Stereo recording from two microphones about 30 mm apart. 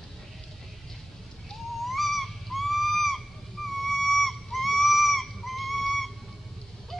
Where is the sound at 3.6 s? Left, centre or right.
Centre.